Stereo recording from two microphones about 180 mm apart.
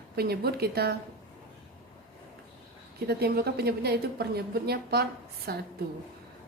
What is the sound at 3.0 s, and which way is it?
A woman's voice, 60° right (ahead or behind).